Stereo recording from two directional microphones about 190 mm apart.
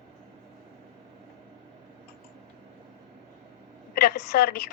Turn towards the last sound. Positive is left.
turn(degrees=55)  # may be behind; listen again after turning